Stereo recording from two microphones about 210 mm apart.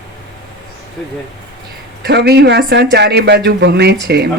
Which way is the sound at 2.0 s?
50° right (ahead or behind).